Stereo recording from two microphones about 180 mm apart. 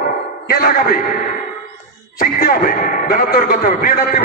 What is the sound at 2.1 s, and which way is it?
A man's voice, 50° left (ahead or behind).